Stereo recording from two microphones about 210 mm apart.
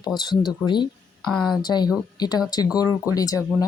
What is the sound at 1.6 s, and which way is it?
Speech, 20° left (ahead or behind).